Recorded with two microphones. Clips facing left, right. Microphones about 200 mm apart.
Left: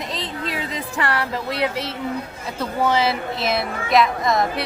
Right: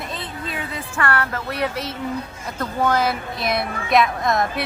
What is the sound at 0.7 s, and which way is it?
Speech, 15° left (ahead or behind).